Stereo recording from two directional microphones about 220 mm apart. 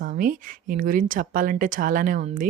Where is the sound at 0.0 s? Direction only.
40° right (ahead or behind).